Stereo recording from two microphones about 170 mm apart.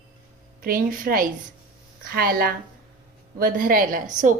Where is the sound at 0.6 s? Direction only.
60° right (ahead or behind).